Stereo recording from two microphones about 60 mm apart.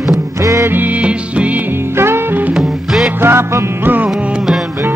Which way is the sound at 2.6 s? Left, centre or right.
Centre.